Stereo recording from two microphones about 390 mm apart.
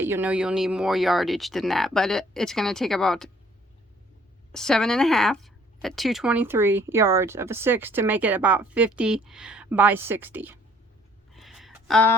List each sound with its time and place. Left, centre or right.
0.0 s speech: centre
4.5 s speech: centre
11.3 s a sound: centre